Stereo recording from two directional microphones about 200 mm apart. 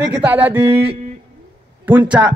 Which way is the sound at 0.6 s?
30° right (ahead or behind).